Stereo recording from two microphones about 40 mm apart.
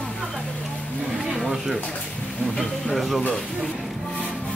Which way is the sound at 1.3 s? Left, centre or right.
Centre.